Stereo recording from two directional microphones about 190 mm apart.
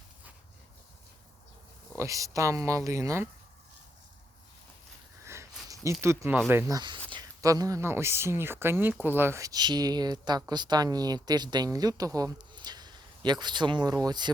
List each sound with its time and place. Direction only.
2.0 s speech: 15° right (ahead or behind)
5.2 s a sound: 15° right (ahead or behind)
6.5 s speech: 15° right (ahead or behind)